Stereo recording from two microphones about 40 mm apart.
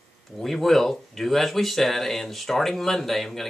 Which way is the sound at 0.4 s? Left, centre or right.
Centre.